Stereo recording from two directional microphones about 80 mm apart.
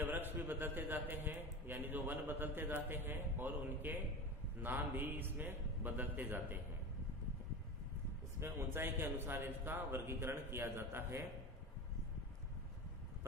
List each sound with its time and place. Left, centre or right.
0.0 s a sound: right
4.6 s a man's voice: right
8.4 s a man's voice: right